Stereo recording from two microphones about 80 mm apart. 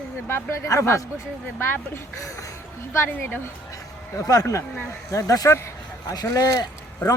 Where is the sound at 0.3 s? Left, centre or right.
Left.